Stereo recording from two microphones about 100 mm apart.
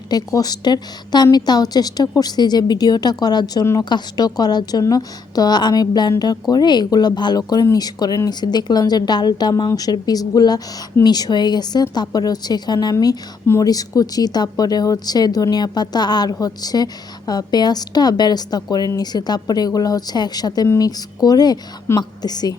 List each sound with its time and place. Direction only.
0.1 s speech: 40° left (ahead or behind)